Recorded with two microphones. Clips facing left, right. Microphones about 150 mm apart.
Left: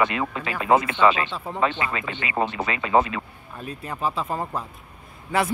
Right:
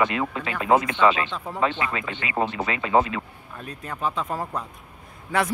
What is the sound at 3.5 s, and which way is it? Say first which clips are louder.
Speech: left 2 dB; 5° left (ahead or behind).